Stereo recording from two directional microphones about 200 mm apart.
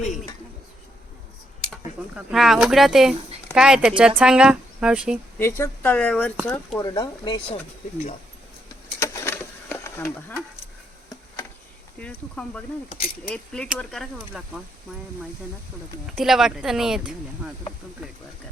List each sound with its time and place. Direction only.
2.1 s speech: centre (ahead or behind)
5.4 s speech: 10° left (ahead or behind)
7.5 s speech: 35° left (ahead or behind)
9.0 s a sound: 10° left (ahead or behind)
11.9 s speech: 5° left (ahead or behind)
16.1 s speech: centre (ahead or behind)